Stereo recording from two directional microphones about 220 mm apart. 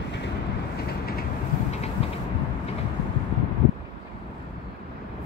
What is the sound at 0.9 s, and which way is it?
Vehicle, 45° left (ahead or behind).